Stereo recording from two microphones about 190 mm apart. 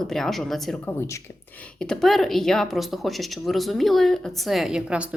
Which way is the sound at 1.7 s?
5° left (ahead or behind).